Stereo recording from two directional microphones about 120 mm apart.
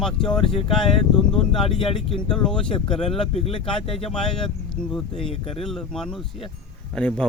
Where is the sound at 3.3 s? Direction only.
55° left (ahead or behind).